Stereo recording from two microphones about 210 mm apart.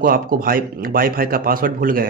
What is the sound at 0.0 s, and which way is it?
A man's voice, 45° right (ahead or behind).